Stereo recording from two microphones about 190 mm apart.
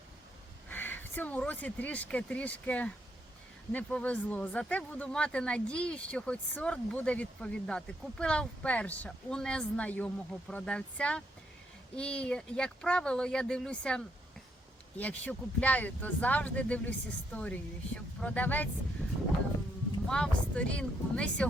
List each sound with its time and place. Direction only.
0.7 s speech: 10° left (ahead or behind)
20.1 s speech: 5° left (ahead or behind)